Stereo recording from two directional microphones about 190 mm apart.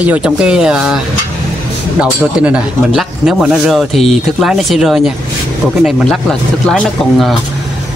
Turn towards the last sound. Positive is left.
turn(degrees=5)  # may be behind; listen again after turning